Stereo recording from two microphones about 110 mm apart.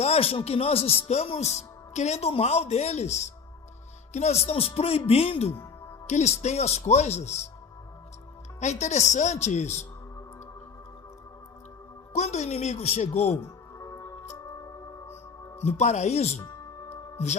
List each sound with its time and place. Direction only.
0.0 s speech: 70° left (ahead or behind)
6.1 s speech: 85° left
8.6 s speech: 90° left
12.1 s speech: 90° left
13.3 s music: 25° left (ahead or behind)
15.5 s speech: 85° left
16.4 s music: 30° left (ahead or behind)